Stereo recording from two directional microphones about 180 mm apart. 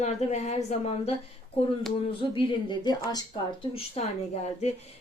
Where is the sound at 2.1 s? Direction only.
25° left (ahead or behind).